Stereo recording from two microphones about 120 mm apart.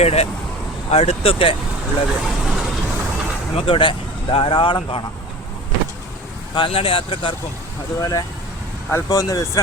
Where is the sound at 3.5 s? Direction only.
50° left (ahead or behind).